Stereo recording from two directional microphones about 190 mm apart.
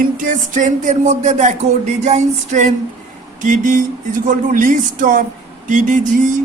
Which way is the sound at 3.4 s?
45° right (ahead or behind).